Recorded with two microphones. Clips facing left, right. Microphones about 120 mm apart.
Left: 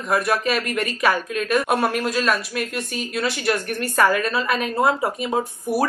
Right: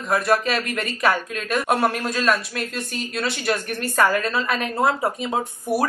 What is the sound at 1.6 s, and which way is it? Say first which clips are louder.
Speech: even; 15° left (ahead or behind).